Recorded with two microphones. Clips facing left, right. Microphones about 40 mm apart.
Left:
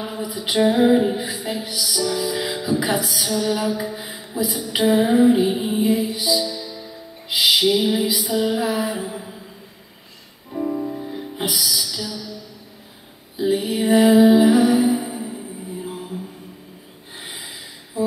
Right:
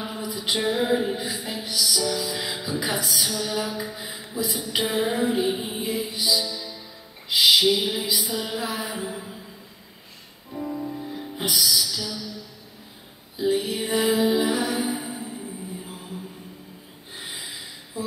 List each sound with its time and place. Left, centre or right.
0.0 s music: centre
3.3 s a sound: centre
4.5 s music: centre
6.1 s music: centre
10.5 s music: centre
11.4 s music: centre
13.4 s music: centre
17.2 s snort: centre